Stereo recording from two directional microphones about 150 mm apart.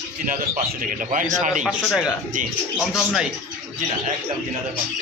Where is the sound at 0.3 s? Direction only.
65° right (ahead or behind).